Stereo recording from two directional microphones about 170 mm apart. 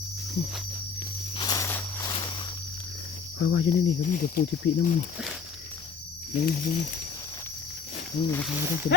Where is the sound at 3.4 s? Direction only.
90° left.